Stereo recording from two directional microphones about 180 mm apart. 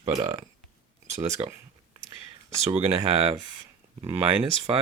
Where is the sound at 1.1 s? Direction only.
40° right (ahead or behind).